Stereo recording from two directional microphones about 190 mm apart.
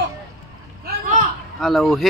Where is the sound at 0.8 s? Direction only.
40° right (ahead or behind).